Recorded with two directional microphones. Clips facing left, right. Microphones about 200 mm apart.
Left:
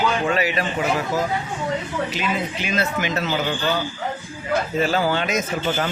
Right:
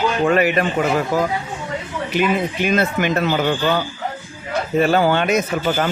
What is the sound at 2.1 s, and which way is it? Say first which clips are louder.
Speech: right 6 dB; 55° right (ahead or behind).